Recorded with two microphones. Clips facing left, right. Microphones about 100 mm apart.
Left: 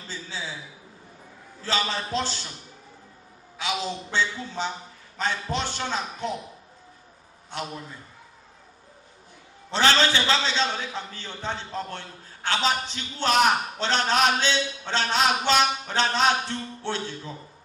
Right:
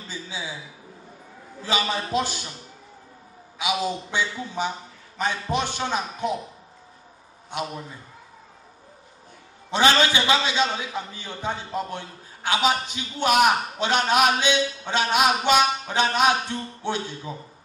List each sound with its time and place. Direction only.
0.1 s a man's voice: 15° right (ahead or behind)
1.6 s a man's voice: 15° right (ahead or behind)
3.5 s a man's voice: 15° right (ahead or behind)
7.5 s a man's voice: 15° right (ahead or behind)
9.7 s a man's voice: 15° right (ahead or behind)